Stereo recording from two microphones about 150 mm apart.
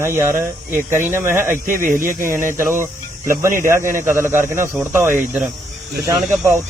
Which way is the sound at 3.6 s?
15° right (ahead or behind).